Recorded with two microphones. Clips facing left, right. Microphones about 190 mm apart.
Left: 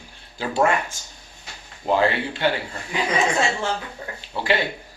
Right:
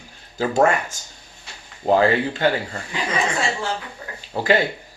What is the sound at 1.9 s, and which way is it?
Speech, 45° right (ahead or behind).